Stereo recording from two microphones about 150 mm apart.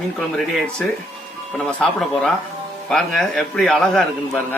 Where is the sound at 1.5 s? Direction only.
5° left (ahead or behind).